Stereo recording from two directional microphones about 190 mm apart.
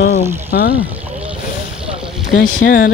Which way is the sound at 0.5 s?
50° left (ahead or behind).